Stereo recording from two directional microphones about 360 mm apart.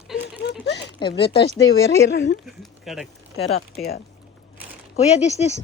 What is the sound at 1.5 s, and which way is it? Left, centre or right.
Speech, left.